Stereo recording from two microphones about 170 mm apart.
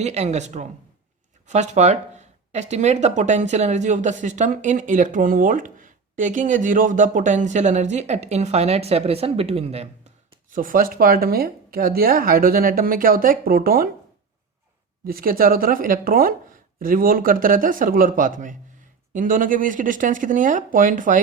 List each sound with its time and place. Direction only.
0.0 s speech: 40° right (ahead or behind)
10.5 s speech: 55° right (ahead or behind)
15.0 s speech: 60° right (ahead or behind)